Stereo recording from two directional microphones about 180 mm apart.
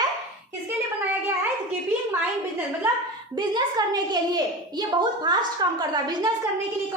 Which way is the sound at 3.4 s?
20° right (ahead or behind).